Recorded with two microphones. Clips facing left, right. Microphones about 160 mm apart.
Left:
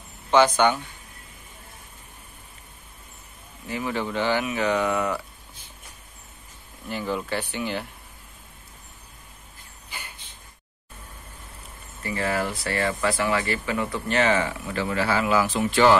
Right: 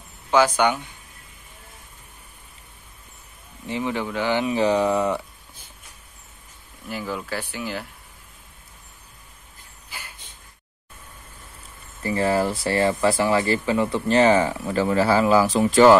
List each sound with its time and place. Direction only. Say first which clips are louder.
0.3 s speech: even; 10° right (ahead or behind)
3.6 s speech: right 3 dB; 25° right (ahead or behind)
3.9 s speech: left 1 dB; 10° right (ahead or behind)
4.4 s speech: right 4 dB; 30° right (ahead or behind)
6.9 s speech: left 1 dB; 5° right (ahead or behind)
9.9 s a sound: even; 5° right (ahead or behind)
12.0 s speech: right 5 dB; 35° right (ahead or behind)